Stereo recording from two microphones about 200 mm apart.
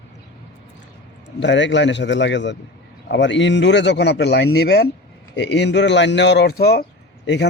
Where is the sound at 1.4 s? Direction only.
65° left (ahead or behind).